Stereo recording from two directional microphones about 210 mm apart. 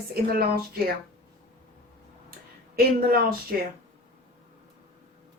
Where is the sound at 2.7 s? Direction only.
45° right (ahead or behind).